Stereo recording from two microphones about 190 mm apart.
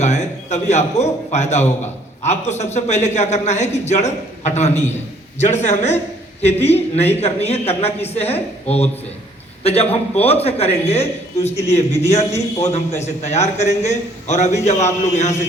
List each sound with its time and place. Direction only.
0.0 s a man's voice: 35° left (ahead or behind)